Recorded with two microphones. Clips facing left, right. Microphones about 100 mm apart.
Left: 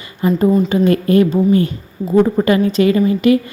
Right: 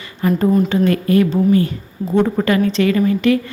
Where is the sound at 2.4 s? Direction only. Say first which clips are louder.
Left 2 dB; 20° left (ahead or behind).